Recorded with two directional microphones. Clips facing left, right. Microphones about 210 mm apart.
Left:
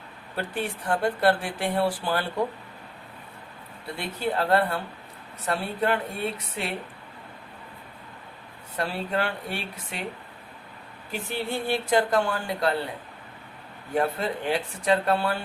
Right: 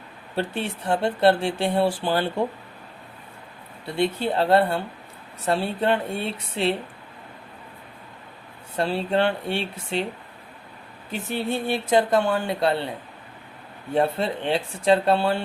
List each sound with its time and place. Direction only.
0.3 s speech: 25° right (ahead or behind)
3.9 s speech: 30° right (ahead or behind)
8.7 s speech: 25° right (ahead or behind)
11.1 s speech: 20° right (ahead or behind)
13.9 s speech: 25° right (ahead or behind)